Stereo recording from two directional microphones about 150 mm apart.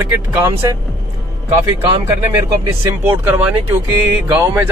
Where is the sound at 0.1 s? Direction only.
20° right (ahead or behind).